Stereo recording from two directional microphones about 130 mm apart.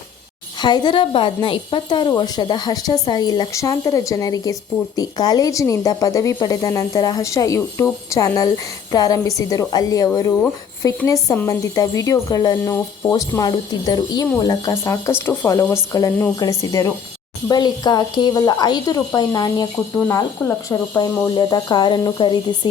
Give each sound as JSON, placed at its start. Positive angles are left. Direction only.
{"t": 0.6, "sound": "a woman's voice", "side_deg": 35}